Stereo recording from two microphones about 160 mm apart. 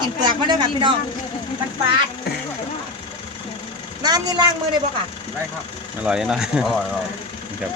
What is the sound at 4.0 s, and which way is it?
Speech, 25° right (ahead or behind).